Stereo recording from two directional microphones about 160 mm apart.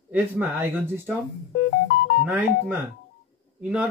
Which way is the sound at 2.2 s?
10° right (ahead or behind).